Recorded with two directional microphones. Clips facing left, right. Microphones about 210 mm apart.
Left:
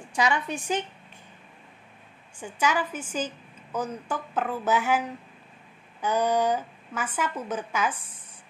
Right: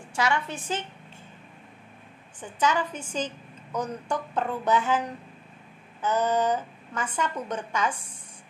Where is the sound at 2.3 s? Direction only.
10° left (ahead or behind).